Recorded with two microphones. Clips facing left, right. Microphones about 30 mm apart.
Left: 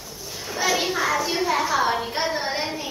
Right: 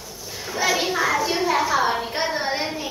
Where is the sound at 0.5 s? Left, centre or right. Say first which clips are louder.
Right 1 dB; centre.